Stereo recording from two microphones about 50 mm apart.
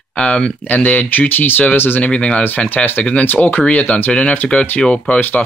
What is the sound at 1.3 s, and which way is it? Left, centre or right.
Speech, left.